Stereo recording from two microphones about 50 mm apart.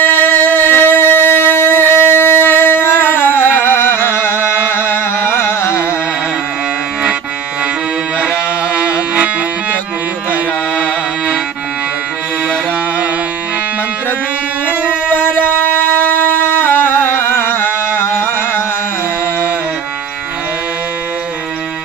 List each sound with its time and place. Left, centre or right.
0.0 s music: left
8.7 s music: right
15.1 s music: left